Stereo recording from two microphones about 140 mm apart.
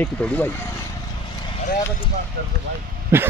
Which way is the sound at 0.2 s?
5° left (ahead or behind).